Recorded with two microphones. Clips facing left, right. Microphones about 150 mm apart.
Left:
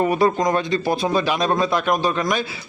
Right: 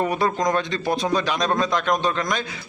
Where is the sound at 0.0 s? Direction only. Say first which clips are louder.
Left 4 dB; 10° left (ahead or behind).